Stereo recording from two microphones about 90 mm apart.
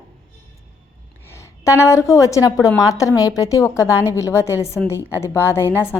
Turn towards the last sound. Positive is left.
turn(degrees=30)  # may be behind; listen again after turning